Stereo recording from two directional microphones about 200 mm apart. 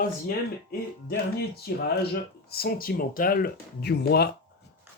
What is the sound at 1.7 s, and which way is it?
Speech, 50° left (ahead or behind).